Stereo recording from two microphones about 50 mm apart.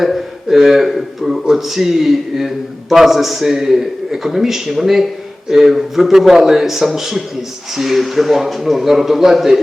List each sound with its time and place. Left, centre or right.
0.0 s a man's voice: centre